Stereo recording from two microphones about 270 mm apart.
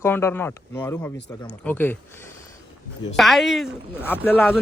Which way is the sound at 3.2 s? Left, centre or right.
Centre.